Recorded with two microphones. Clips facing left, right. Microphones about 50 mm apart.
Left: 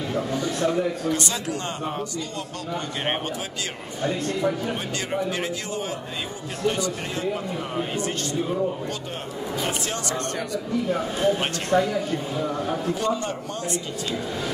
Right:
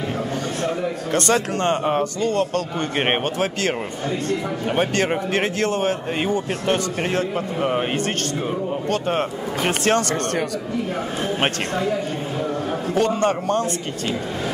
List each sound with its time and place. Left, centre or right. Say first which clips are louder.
1.1 s a man's voice: right 7 dB; right
9.1 s a man's voice: right 7 dB; right
12.9 s a man's voice: right 6 dB; right